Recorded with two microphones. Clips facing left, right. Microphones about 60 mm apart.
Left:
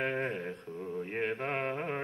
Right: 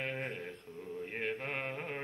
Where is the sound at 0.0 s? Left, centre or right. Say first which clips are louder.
Left 6 dB; left.